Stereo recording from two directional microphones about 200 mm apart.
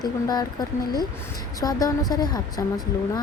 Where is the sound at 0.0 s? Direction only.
20° left (ahead or behind).